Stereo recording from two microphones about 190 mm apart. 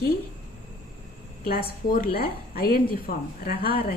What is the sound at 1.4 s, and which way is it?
A woman's voice, 50° left (ahead or behind).